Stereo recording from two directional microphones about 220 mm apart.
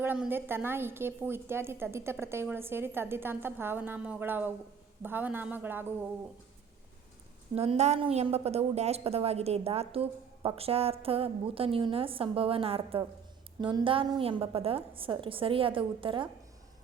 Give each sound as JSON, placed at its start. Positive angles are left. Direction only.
{"t": 0.0, "sound": "a woman's voice", "side_deg": -10}
{"t": 7.5, "sound": "a woman's voice", "side_deg": -25}